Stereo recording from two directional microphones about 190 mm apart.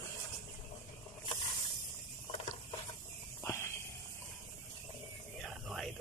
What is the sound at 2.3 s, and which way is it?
Ratchet, 30° left (ahead or behind).